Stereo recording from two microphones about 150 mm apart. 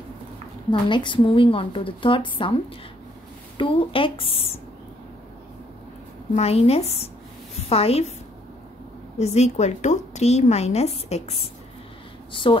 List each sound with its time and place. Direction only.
0.7 s speech: 30° left (ahead or behind)
6.3 s a woman's voice: 45° left (ahead or behind)
9.2 s a woman's voice: 45° left (ahead or behind)
12.3 s speech: 35° left (ahead or behind)